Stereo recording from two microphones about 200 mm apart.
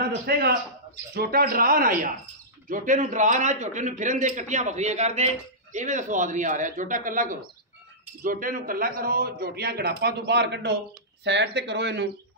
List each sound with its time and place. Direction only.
0.3 s a man's voice: 50° right (ahead or behind)